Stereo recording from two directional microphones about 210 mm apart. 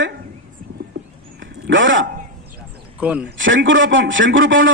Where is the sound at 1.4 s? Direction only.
60° right (ahead or behind).